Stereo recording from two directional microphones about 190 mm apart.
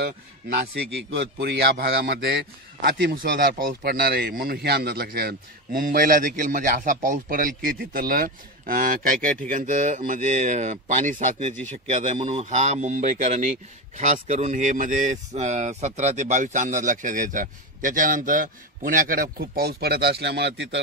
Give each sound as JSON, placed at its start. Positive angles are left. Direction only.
{"t": 1.1, "sound": "a man's voice", "side_deg": -65}